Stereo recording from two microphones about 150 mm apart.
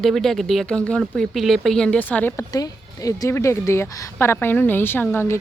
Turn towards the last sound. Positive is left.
turn(degrees=15)  # may be behind; listen again after turning